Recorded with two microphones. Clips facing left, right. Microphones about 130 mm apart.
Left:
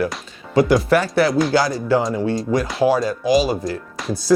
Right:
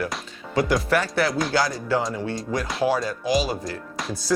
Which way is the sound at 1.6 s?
20° left (ahead or behind).